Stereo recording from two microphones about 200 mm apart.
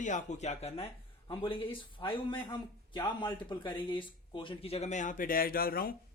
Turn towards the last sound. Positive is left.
turn(degrees=50)  # may be behind; listen again after turning